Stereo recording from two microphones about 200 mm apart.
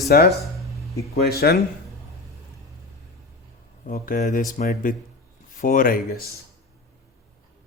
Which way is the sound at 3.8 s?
40° left (ahead or behind).